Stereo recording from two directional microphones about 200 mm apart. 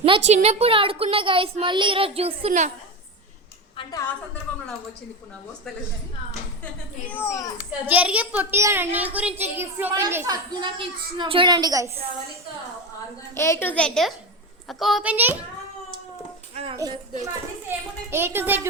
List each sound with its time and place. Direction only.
0.0 s a woman's voice: 30° right (ahead or behind)
7.1 s a child's voice: 15° left (ahead or behind)
7.9 s a child's voice: 5° right (ahead or behind)
13.3 s a child's voice: 15° left (ahead or behind); by 15.4 s 10° right (ahead or behind)
16.7 s a child's voice: 20° right (ahead or behind)